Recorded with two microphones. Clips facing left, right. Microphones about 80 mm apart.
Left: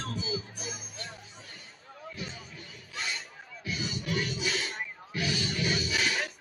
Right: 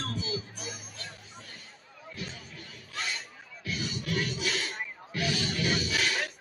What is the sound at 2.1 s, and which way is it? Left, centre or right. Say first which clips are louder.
Music: right 3 dB; centre.